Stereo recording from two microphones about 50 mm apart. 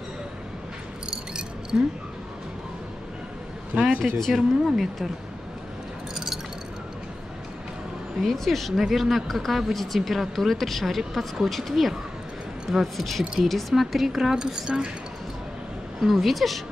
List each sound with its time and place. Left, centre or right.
1.1 s a sound: centre
3.7 s speech: right
4.2 s speech: centre
6.1 s glass: centre
8.2 s a woman's voice: centre
16.0 s speech: centre